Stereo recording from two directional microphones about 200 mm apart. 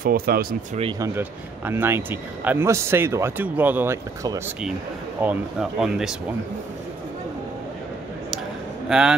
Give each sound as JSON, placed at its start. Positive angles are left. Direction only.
{"t": 0.0, "sound": "speech", "side_deg": -45}
{"t": 0.9, "sound": "speech", "side_deg": -15}
{"t": 8.8, "sound": "speech", "side_deg": -5}